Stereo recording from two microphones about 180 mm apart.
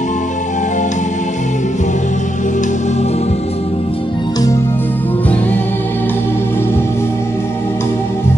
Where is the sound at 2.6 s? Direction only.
40° left (ahead or behind).